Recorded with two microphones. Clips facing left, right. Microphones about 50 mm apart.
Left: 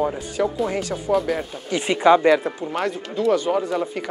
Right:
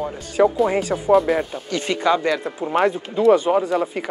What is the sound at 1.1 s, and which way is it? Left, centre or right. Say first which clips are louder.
Speech: right 5 dB; centre.